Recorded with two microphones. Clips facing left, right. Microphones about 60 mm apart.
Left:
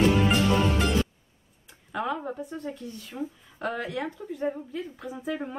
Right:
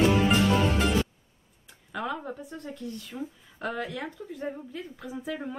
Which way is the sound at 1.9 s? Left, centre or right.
Centre.